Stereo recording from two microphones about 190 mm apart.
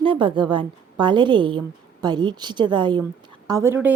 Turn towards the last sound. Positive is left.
turn(degrees=-10)  # may be behind; listen again after turning